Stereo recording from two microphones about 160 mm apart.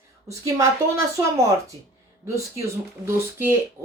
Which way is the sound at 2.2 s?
20° right (ahead or behind).